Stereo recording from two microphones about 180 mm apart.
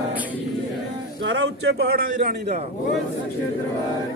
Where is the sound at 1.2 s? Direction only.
80° right; by 2.6 s 45° right (ahead or behind).